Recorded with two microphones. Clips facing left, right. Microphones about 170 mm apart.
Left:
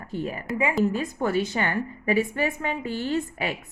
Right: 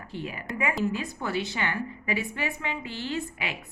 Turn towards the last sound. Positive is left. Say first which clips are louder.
# left 5 dB
turn(degrees=45)  # may be behind; listen again after turning